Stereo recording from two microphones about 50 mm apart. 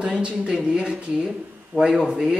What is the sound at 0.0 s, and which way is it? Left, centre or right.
Speech, centre.